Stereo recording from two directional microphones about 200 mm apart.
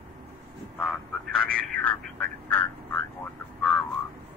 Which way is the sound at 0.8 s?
5° left (ahead or behind).